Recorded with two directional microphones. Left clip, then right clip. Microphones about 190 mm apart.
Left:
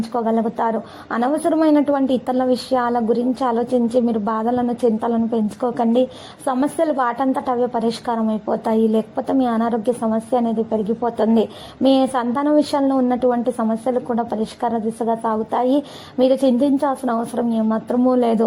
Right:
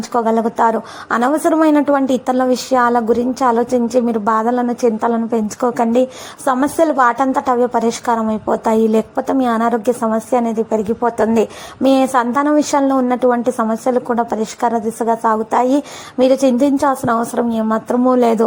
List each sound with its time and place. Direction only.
0.1 s a woman's voice: 20° right (ahead or behind)